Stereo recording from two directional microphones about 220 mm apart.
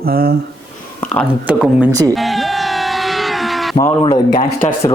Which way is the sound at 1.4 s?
5° right (ahead or behind).